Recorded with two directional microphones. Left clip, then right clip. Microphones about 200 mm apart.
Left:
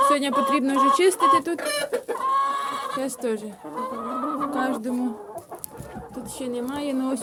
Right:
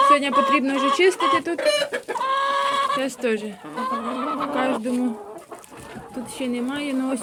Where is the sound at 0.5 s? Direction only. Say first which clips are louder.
Even; 5° left (ahead or behind).